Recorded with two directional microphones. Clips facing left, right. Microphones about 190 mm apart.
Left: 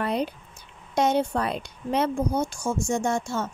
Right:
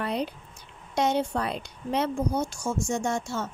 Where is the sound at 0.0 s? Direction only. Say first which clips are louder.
Left 3 dB; 50° left (ahead or behind).